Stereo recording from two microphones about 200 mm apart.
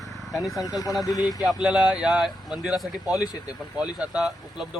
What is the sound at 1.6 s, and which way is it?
Speech, 5° right (ahead or behind).